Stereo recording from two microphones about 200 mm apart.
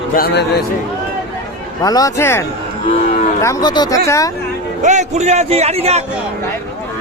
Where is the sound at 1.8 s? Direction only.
20° left (ahead or behind).